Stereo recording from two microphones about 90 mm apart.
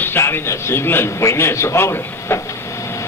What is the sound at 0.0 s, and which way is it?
A man's voice, 25° left (ahead or behind).